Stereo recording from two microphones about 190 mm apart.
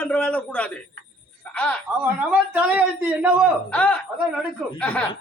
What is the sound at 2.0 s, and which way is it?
A man's voice, 5° right (ahead or behind).